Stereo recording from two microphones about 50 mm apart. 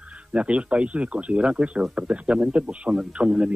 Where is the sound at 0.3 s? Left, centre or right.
Right.